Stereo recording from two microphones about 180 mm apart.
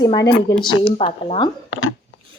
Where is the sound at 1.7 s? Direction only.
90° left.